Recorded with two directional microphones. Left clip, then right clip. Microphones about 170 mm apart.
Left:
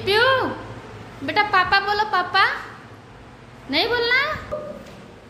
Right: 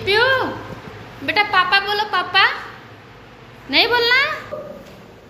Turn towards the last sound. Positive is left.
turn(degrees=10)  # may be behind; listen again after turning